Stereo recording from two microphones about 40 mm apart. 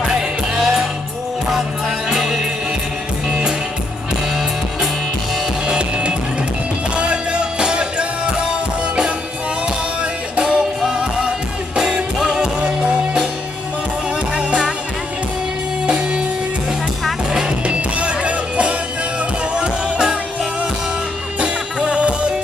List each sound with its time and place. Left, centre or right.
0.0 s music: centre
0.6 s music: centre
2.0 s music: centre
5.6 s music: right
9.6 s music: right
10.4 s music: centre
12.2 s music: centre
14.3 s music: right
15.9 s music: right
17.7 s music: right
21.3 s music: right